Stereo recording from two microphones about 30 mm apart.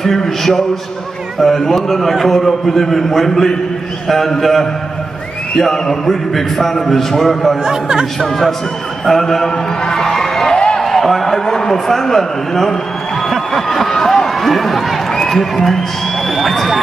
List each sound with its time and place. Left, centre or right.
0.0 s a man's voice: centre
6.0 s a man's voice: centre
13.3 s a sound: centre
13.8 s a man's voice: centre